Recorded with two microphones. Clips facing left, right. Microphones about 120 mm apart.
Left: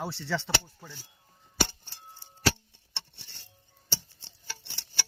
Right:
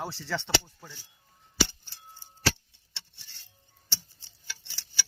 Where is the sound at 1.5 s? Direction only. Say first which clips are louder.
Right 1 dB; 55° left (ahead or behind).